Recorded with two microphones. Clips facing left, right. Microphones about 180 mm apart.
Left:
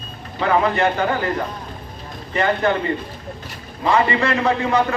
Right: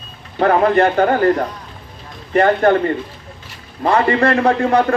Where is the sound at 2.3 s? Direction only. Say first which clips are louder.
Right 6 dB; 55° right (ahead or behind).